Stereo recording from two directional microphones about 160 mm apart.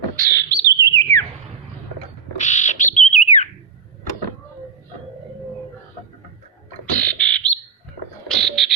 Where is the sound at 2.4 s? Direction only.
50° left (ahead or behind).